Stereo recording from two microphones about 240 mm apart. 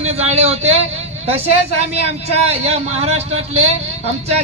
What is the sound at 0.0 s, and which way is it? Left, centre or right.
Speech, right.